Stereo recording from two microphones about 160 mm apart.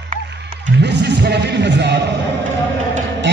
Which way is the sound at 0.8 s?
90° right.